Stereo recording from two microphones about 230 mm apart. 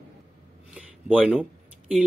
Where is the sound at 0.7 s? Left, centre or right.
Centre.